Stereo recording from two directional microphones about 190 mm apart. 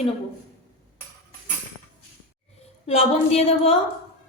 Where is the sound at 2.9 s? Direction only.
35° left (ahead or behind).